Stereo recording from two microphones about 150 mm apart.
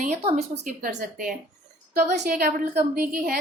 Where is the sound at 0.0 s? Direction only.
50° right (ahead or behind).